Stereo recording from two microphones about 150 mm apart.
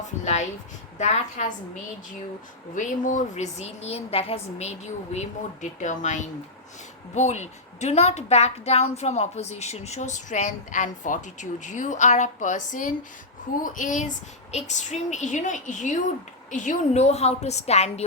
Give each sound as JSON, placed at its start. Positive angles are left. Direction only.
{"t": 0.9, "sound": "a woman's voice", "side_deg": 50}
{"t": 2.7, "sound": "a woman's voice", "side_deg": 60}